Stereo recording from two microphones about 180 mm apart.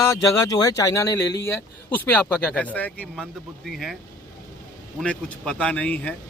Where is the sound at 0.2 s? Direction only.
20° left (ahead or behind); by 3.9 s centre (ahead or behind).